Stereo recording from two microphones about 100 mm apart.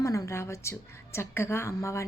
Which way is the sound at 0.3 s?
30° left (ahead or behind).